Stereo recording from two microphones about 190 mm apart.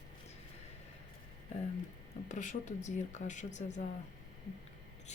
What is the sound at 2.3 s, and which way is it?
Speech, 40° left (ahead or behind).